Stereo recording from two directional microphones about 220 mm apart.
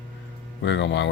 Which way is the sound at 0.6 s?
50° left (ahead or behind).